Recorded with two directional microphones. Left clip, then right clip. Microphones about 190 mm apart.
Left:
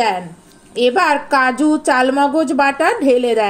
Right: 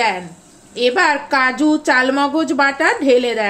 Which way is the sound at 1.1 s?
35° left (ahead or behind).